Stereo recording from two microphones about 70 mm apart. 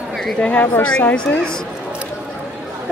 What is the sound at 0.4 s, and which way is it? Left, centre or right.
A woman's voice, left.